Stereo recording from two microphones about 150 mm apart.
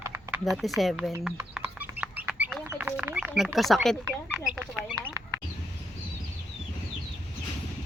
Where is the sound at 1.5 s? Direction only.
10° right (ahead or behind).